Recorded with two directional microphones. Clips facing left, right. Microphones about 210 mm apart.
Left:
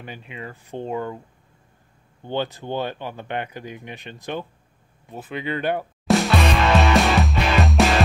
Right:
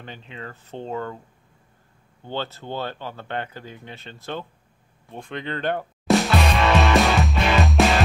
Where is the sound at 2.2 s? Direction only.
15° left (ahead or behind).